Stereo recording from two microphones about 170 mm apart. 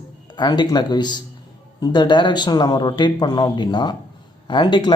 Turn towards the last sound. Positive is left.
turn(degrees=25)  # may be behind; listen again after turning